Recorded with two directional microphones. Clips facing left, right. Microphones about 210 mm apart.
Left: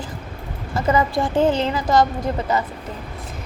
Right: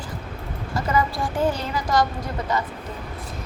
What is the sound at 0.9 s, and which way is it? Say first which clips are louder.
A woman's voice: left 3 dB; 20° left (ahead or behind).